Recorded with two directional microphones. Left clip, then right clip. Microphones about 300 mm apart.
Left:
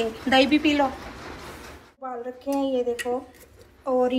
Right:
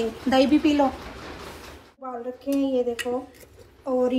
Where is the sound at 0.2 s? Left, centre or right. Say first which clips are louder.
Even; centre.